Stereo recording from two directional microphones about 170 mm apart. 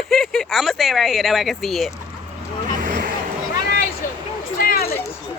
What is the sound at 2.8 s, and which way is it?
Vehicle, 55° right (ahead or behind).